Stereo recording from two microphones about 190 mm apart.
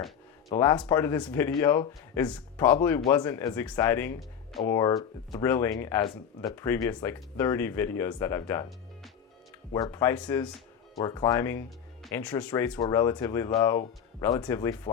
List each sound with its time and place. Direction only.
0.5 s speech: 15° left (ahead or behind)
9.7 s speech: 15° left (ahead or behind)